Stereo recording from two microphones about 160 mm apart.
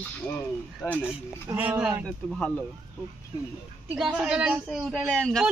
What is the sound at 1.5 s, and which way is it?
Speech, 5° right (ahead or behind).